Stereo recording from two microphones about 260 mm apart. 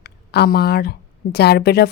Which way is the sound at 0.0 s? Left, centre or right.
Left.